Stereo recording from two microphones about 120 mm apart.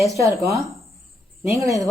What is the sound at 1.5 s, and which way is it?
Speech, 25° right (ahead or behind).